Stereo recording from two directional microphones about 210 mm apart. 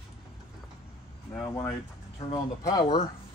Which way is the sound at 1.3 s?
10° left (ahead or behind).